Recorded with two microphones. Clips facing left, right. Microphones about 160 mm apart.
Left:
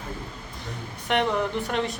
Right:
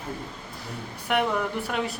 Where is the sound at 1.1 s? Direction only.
5° right (ahead or behind).